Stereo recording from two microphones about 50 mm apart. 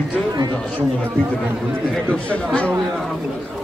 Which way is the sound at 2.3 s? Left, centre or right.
Left.